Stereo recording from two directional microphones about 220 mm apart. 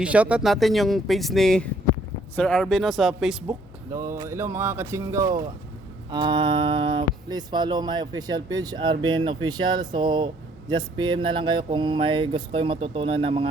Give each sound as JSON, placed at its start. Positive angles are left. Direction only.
{"t": 0.0, "sound": "speech", "side_deg": -5}
{"t": 3.9, "sound": "speech", "side_deg": -15}